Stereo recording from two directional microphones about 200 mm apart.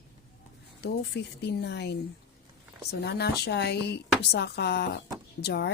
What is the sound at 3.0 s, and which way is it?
A woman's voice, 55° left (ahead or behind).